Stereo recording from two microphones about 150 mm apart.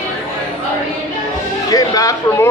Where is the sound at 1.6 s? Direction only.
25° left (ahead or behind).